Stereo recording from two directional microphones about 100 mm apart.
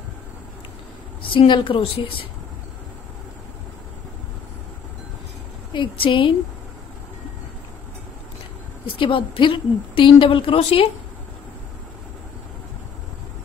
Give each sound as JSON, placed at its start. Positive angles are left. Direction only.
{"t": 1.3, "sound": "a woman's voice", "side_deg": 60}
{"t": 5.7, "sound": "a woman's voice", "side_deg": 55}
{"t": 8.9, "sound": "a woman's voice", "side_deg": 60}